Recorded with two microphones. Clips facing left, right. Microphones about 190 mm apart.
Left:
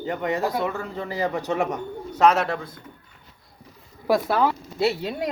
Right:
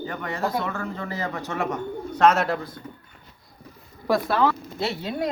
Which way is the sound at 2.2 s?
Centre (ahead or behind).